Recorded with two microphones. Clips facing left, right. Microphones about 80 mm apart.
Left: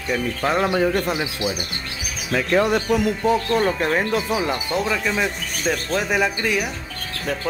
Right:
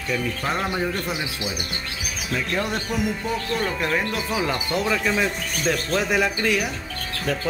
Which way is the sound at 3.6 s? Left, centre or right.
Left.